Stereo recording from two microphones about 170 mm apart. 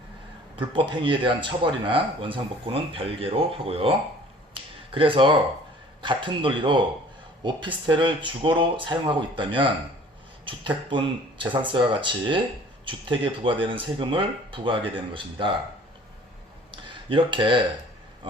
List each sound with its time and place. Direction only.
0.5 s speech: 30° right (ahead or behind)
16.7 s speech: 30° right (ahead or behind)